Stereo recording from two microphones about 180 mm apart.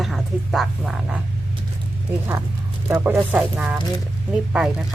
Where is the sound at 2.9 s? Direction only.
15° right (ahead or behind).